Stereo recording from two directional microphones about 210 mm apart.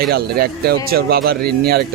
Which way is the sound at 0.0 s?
50° right (ahead or behind).